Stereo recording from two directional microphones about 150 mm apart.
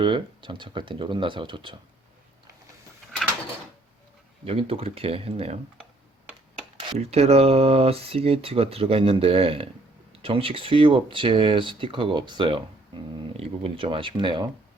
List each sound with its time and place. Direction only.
0.0 s speech: 35° right (ahead or behind)
4.4 s speech: 40° right (ahead or behind)
6.7 s speech: 45° right (ahead or behind)